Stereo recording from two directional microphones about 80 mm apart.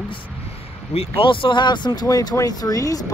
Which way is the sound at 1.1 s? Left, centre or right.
Left.